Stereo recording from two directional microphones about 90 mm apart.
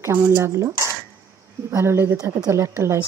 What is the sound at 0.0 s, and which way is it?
Speech, 25° right (ahead or behind).